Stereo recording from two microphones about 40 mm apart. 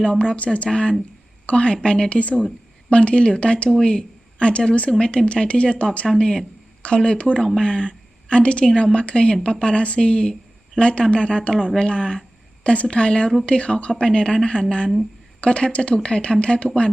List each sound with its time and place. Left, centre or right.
0.0 s speech: left
0.7 s speech: left
6.1 s a woman's voice: centre
15.4 s speech: left